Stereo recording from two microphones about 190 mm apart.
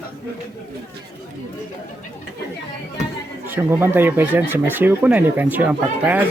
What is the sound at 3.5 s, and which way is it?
Speech, 10° right (ahead or behind).